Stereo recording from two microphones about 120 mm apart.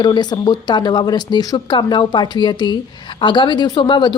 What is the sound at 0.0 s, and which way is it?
Speech, 35° left (ahead or behind).